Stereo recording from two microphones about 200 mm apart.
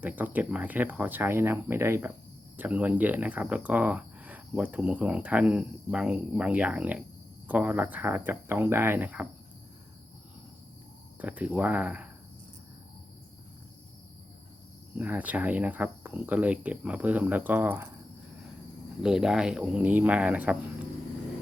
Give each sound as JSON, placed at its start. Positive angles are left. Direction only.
{"t": 0.0, "sound": "speech", "side_deg": -10}
{"t": 11.2, "sound": "speech", "side_deg": -10}
{"t": 14.9, "sound": "speech", "side_deg": -10}
{"t": 19.0, "sound": "speech", "side_deg": -5}